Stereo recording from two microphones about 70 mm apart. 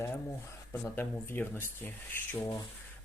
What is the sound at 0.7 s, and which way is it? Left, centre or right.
Speech, left.